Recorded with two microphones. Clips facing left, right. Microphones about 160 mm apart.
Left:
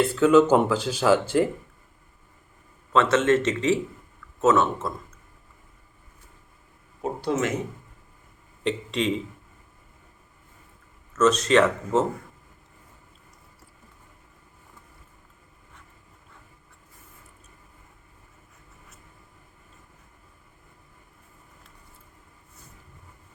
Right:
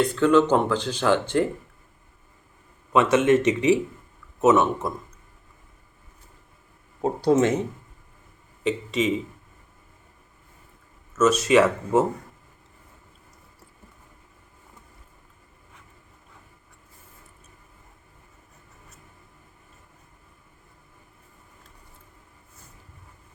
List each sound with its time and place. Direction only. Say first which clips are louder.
0.0 s speech: left 1 dB; 5° left (ahead or behind)
2.9 s speech: right 2 dB; 15° right (ahead or behind)
7.3 s speech: right 6 dB; 30° right (ahead or behind)
8.6 s speech: right 2 dB; 5° right (ahead or behind)
11.1 s speech: right 1 dB; 10° right (ahead or behind)